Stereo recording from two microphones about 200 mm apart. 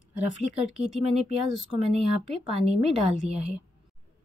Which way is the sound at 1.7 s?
30° right (ahead or behind).